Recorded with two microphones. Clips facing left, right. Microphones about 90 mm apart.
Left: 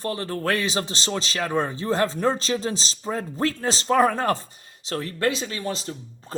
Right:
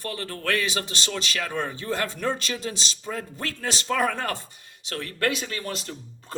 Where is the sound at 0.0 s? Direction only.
30° left (ahead or behind).